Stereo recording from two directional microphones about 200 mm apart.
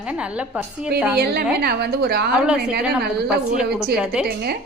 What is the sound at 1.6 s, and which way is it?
Speech, 50° right (ahead or behind).